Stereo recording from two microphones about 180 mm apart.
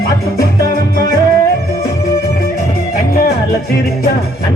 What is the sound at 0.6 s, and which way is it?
Music, 20° left (ahead or behind).